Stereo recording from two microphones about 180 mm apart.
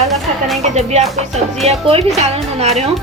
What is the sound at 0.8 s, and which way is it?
A woman's voice, 35° right (ahead or behind).